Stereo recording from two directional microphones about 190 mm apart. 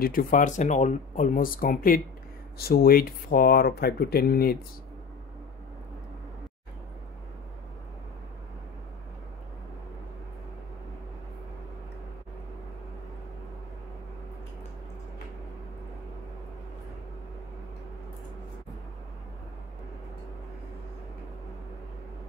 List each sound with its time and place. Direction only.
0.0 s speech: 45° left (ahead or behind)